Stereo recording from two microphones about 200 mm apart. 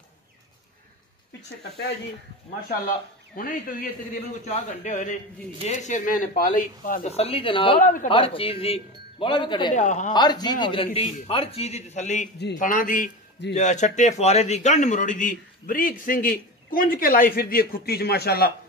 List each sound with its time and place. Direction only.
3.3 s a man's voice: 45° left (ahead or behind); by 7.8 s 25° left (ahead or behind)
7.8 s speech: 40° left (ahead or behind)
8.1 s speech: 25° left (ahead or behind)
9.8 s speech: 35° left (ahead or behind)
10.1 s a man's voice: 20° left (ahead or behind); by 18.5 s 50° left (ahead or behind)